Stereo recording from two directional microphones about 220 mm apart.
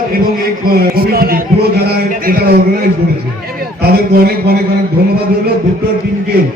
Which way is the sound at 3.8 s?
45° right (ahead or behind).